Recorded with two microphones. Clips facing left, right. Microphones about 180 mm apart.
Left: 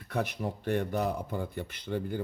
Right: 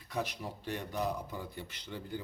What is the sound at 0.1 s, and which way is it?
Speech, 55° left (ahead or behind).